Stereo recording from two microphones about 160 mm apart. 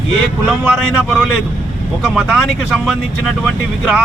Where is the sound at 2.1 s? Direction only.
5° left (ahead or behind).